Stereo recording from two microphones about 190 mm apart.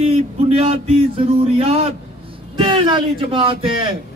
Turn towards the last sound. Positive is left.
turn(degrees=-25)  # may be behind; listen again after turning